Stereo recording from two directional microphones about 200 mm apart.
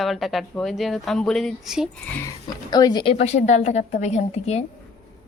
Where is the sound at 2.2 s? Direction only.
20° left (ahead or behind).